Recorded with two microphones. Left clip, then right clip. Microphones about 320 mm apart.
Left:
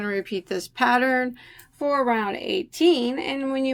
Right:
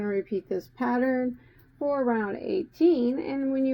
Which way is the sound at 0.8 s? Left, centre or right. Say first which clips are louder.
Left 7 dB; left.